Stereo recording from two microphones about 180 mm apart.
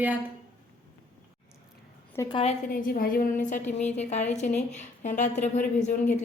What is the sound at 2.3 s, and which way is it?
Speech, 35° left (ahead or behind).